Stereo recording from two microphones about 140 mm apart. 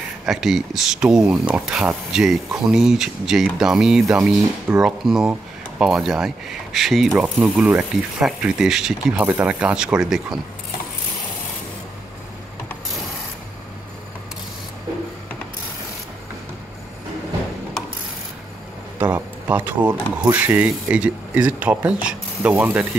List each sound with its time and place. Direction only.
0.3 s speech: centre (ahead or behind)
4.4 s speech: 25° right (ahead or behind)
4.8 s speech: 5° right (ahead or behind)
18.9 s a sound: 10° right (ahead or behind)
20.2 s speech: 10° right (ahead or behind)